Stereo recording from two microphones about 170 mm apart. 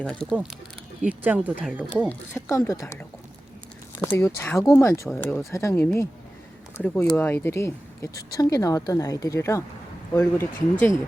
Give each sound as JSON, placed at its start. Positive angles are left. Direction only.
{"t": 0.0, "sound": "speech", "side_deg": 5}
{"t": 1.0, "sound": "speech", "side_deg": -10}
{"t": 2.0, "sound": "speech", "side_deg": 15}
{"t": 5.0, "sound": "speech", "side_deg": 5}
{"t": 5.5, "sound": "speech", "side_deg": 15}